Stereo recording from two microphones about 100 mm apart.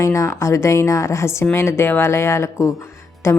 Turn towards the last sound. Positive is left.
turn(degrees=30)  # may be behind; listen again after turning